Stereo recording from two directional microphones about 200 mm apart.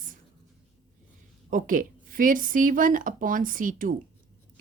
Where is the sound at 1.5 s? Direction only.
40° right (ahead or behind).